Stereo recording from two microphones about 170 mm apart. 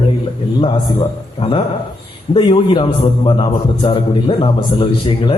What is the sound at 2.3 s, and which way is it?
A man's voice, 25° left (ahead or behind).